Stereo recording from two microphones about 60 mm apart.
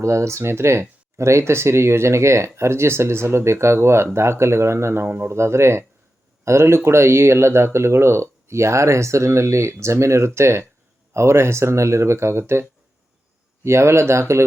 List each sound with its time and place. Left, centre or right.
0.0 s speech: right
5.0 s speech: right
13.7 s speech: right